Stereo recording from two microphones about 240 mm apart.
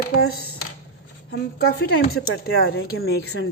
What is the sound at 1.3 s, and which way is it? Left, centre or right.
Speech, left.